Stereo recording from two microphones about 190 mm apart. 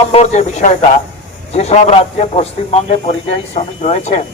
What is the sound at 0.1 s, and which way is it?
Speech, 35° left (ahead or behind).